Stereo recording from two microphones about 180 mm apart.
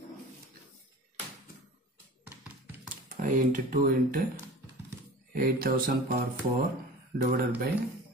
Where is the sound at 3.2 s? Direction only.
50° right (ahead or behind).